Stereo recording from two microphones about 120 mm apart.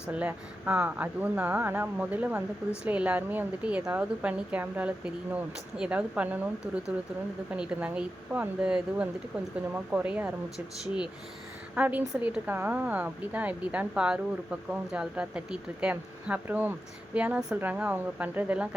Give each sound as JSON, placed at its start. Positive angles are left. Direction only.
{"t": 0.1, "sound": "a woman's voice", "side_deg": -10}
{"t": 7.5, "sound": "a woman's voice", "side_deg": -10}
{"t": 11.7, "sound": "a woman's voice", "side_deg": -10}